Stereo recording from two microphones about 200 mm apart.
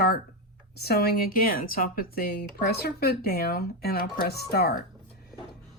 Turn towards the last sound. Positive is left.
turn(degrees=50)  # may be behind; listen again after turning